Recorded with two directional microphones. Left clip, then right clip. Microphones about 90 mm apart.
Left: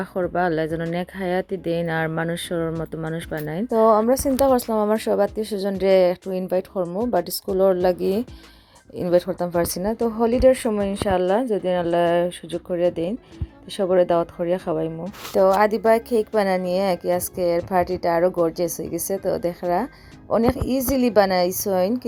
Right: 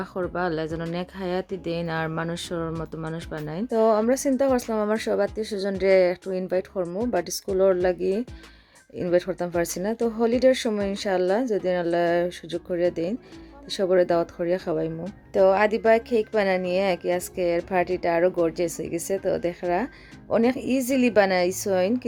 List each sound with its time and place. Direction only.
0.0 s speech: 40° left (ahead or behind)
4.4 s a woman's voice: 35° left (ahead or behind)
7.0 s a woman's voice: centre (ahead or behind)
7.5 s a woman's voice: 30° left (ahead or behind); by 14.9 s 10° left (ahead or behind)
15.4 s a woman's voice: 30° left (ahead or behind)